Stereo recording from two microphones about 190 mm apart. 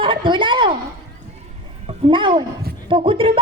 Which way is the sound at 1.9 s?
25° right (ahead or behind).